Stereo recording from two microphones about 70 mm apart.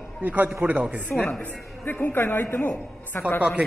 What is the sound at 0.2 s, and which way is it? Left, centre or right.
Speech, right.